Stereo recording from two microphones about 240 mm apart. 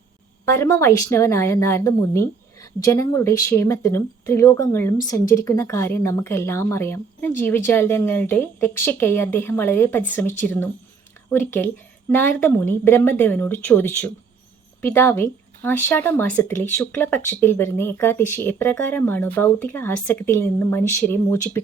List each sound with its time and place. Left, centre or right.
0.4 s speech: centre